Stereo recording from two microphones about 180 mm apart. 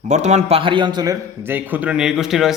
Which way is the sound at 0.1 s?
40° right (ahead or behind).